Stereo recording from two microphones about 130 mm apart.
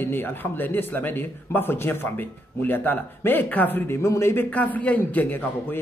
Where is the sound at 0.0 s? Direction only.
15° left (ahead or behind).